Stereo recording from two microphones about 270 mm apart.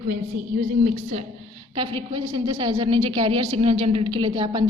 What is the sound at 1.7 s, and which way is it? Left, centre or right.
A woman's voice, centre.